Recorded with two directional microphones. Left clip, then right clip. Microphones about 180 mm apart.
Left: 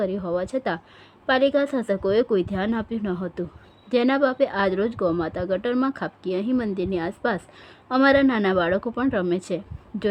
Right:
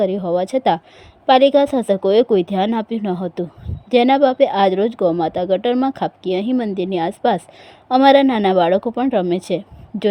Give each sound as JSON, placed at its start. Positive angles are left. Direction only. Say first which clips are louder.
{"t": 0.0, "sound": "speech", "louder": "right 7 dB", "side_deg": -15}